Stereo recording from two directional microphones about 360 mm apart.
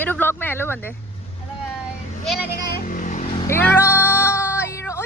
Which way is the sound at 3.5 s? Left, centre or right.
Centre.